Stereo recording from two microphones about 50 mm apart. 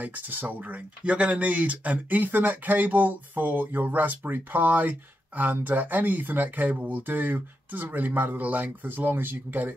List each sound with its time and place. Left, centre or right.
0.0 s speech: right
1.0 s speech: right